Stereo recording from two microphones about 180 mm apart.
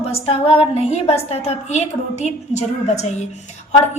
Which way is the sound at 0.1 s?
30° left (ahead or behind).